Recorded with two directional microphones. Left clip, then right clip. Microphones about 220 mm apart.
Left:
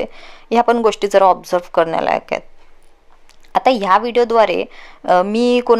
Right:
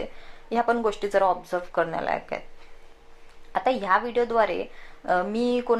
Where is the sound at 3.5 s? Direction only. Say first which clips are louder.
Left 10 dB; 45° left (ahead or behind).